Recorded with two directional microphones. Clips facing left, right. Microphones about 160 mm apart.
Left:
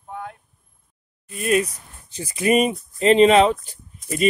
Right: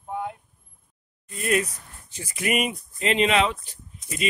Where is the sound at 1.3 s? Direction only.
20° left (ahead or behind).